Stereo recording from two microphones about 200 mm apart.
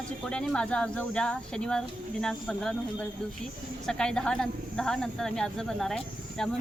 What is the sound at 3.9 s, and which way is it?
Speech, 5° left (ahead or behind).